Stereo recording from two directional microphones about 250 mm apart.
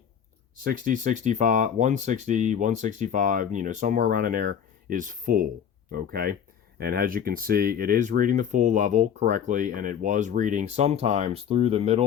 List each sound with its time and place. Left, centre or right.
0.5 s speech: right